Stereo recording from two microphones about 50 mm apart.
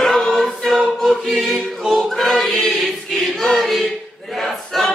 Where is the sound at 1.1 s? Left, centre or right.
Centre.